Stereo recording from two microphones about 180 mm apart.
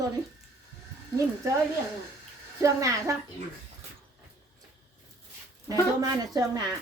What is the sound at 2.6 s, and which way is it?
Speech, 15° right (ahead or behind).